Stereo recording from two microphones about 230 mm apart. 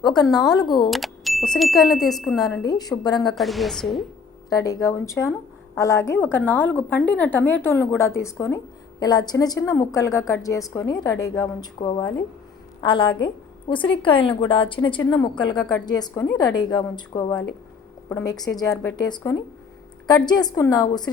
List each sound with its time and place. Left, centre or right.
0.0 s a woman's voice: centre
0.9 s speech: centre
2.6 s a woman's voice: centre
3.3 s speech: centre
4.4 s a woman's voice: centre